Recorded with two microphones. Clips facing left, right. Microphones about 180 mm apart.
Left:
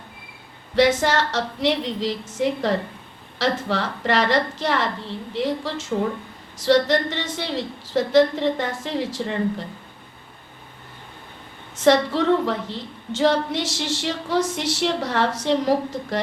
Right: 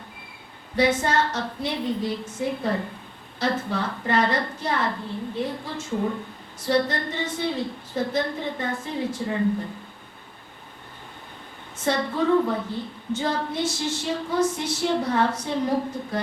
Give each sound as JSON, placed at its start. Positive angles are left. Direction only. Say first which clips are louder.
{"t": 0.8, "sound": "a woman's voice", "louder": "left 3 dB", "side_deg": 85}
{"t": 11.8, "sound": "a woman's voice", "louder": "left 6 dB", "side_deg": 85}